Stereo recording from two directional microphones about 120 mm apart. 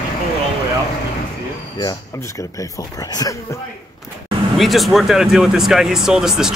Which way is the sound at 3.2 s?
30° left (ahead or behind).